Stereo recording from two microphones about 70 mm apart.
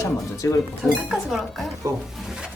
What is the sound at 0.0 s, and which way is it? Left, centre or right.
Speech, left.